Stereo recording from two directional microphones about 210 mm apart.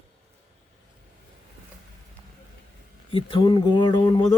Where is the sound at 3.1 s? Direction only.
25° left (ahead or behind).